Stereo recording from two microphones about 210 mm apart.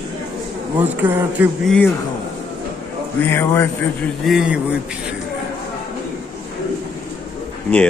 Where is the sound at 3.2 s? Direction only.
10° left (ahead or behind).